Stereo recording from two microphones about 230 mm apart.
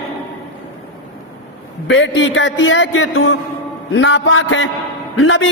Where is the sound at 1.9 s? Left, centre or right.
Left.